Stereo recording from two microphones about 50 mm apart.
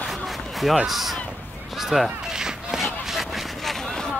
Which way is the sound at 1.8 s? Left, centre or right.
Centre.